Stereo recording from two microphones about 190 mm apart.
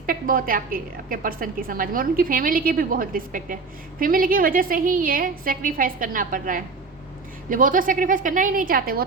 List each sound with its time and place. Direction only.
0.0 s a woman's voice: 50° right (ahead or behind)